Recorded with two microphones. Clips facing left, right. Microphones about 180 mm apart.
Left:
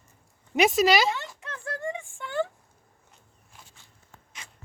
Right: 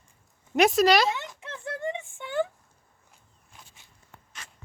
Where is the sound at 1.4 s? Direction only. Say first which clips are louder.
Right 1 dB; 25° right (ahead or behind).